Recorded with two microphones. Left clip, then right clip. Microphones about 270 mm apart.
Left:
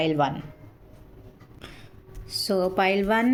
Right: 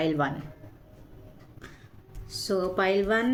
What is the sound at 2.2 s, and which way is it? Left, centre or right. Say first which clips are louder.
Speech: left 4 dB; left.